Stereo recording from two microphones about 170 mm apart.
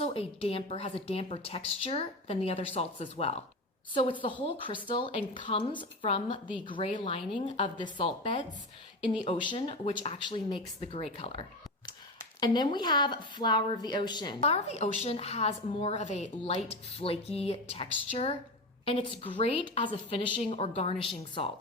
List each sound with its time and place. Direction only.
0.0 s a woman's voice: 35° left (ahead or behind)
7.8 s a woman's voice: 30° left (ahead or behind)
14.4 s a woman's voice: 40° left (ahead or behind)